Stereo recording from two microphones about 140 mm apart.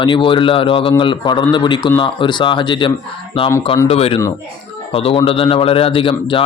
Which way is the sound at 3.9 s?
45° left (ahead or behind).